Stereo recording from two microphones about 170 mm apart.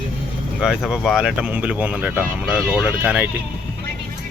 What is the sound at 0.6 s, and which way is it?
Speech, 5° right (ahead or behind).